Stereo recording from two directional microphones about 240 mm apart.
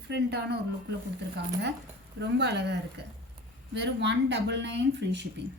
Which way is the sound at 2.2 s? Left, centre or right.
Right.